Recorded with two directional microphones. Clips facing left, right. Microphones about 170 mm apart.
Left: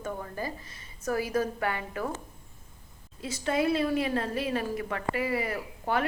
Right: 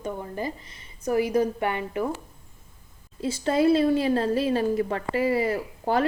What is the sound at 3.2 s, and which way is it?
A woman's voice, 30° right (ahead or behind).